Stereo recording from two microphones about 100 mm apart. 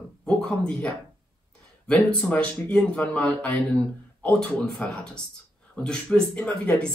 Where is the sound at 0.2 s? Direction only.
5° left (ahead or behind).